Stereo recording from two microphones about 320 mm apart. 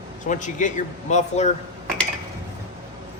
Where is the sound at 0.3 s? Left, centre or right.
Left.